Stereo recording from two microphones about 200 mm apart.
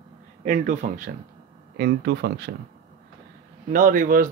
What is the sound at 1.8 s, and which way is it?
Speech, 60° right (ahead or behind).